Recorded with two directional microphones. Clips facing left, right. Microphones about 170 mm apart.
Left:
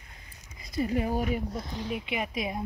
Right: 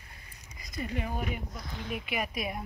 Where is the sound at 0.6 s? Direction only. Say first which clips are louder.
Left 7 dB; 30° left (ahead or behind).